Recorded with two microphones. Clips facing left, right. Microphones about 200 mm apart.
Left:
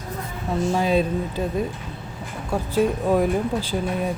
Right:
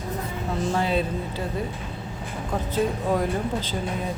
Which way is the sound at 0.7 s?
15° left (ahead or behind).